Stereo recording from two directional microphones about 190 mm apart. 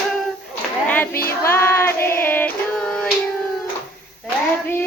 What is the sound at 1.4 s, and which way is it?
Child singing, 15° left (ahead or behind).